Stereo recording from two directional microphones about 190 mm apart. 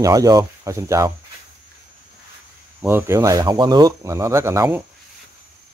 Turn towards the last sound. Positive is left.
turn(degrees=-15)  # may be behind; listen again after turning